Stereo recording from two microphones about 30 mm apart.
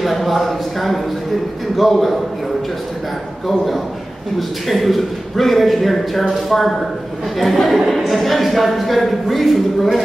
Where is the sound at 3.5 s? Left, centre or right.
Centre.